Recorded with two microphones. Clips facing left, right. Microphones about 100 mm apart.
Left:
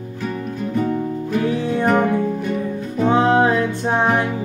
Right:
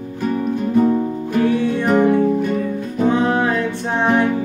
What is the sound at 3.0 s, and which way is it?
Music, 20° left (ahead or behind).